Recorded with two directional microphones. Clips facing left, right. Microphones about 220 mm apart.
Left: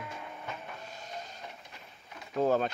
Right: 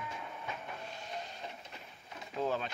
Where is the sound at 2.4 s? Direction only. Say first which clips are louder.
Left 7 dB; 45° left (ahead or behind).